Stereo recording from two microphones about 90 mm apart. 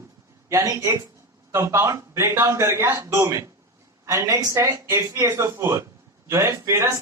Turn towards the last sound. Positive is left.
turn(degrees=-30)  # may be behind; listen again after turning